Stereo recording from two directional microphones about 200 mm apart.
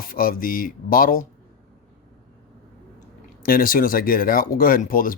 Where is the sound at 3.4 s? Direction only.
45° left (ahead or behind).